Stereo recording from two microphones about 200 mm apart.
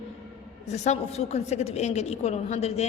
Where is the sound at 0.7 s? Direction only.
30° left (ahead or behind).